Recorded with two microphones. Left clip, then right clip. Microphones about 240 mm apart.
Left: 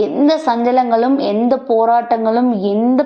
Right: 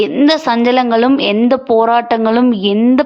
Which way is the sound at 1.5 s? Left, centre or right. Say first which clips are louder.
Right 1 dB; right.